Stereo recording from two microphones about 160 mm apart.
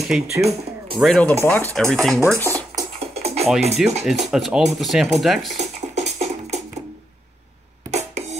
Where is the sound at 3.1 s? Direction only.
40° right (ahead or behind).